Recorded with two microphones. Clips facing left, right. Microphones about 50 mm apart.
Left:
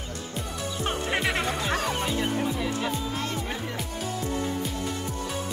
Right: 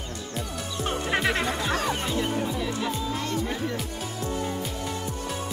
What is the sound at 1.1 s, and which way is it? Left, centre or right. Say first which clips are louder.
Speech: right 3 dB; centre.